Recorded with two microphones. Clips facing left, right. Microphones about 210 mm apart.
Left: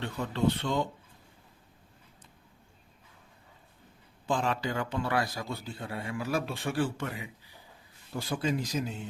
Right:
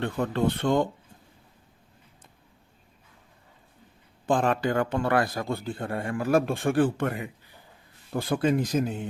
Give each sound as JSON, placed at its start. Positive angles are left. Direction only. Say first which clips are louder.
{"t": 0.0, "sound": "a man's voice", "louder": "right 4 dB", "side_deg": -55}
{"t": 4.3, "sound": "a man's voice", "louder": "right 6 dB", "side_deg": -55}